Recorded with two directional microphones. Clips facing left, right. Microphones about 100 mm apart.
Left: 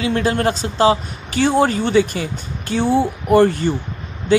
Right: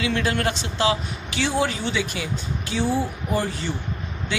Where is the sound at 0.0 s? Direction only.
35° left (ahead or behind).